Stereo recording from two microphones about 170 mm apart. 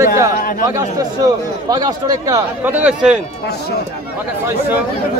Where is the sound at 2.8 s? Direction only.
5° right (ahead or behind).